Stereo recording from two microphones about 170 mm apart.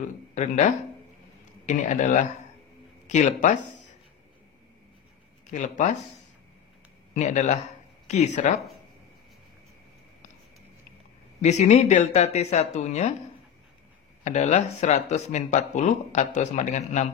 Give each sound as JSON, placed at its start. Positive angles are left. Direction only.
{"t": 0.3, "sound": "speech", "side_deg": 45}
{"t": 1.7, "sound": "speech", "side_deg": 45}
{"t": 5.5, "sound": "speech", "side_deg": 50}
{"t": 7.2, "sound": "speech", "side_deg": 45}
{"t": 11.4, "sound": "speech", "side_deg": 40}
{"t": 14.2, "sound": "speech", "side_deg": 40}